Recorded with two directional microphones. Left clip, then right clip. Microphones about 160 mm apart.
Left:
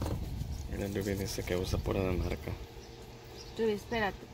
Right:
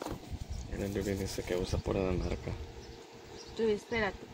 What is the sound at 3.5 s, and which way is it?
Speech, 55° left (ahead or behind).